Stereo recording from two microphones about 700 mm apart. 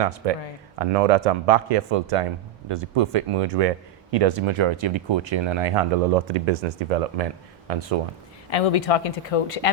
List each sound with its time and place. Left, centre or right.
0.2 s speech: right
6.3 s speech: right
7.7 s speech: right
8.4 s speech: left